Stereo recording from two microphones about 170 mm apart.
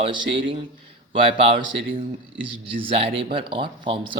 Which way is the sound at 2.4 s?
30° right (ahead or behind).